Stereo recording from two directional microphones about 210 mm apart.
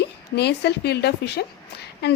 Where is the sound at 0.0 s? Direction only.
50° left (ahead or behind).